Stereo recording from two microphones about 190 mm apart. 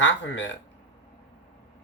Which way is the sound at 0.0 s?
75° left (ahead or behind).